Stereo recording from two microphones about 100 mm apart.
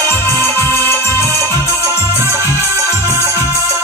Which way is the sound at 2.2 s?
25° right (ahead or behind).